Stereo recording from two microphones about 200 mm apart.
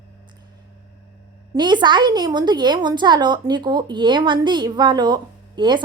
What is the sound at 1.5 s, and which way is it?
A woman's voice, 20° right (ahead or behind).